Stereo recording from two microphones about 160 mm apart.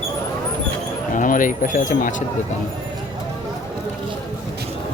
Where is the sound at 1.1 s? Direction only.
55° left (ahead or behind).